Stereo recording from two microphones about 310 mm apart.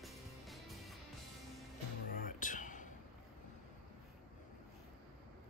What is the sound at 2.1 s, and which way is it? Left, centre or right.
Music, left.